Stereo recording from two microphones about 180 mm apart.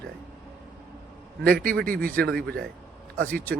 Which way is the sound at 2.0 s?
5° left (ahead or behind).